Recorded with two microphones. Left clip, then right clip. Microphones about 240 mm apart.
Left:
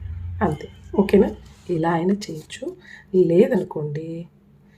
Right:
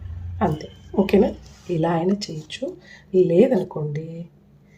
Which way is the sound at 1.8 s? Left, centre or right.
Centre.